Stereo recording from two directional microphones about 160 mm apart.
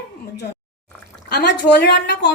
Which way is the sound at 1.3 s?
90° left.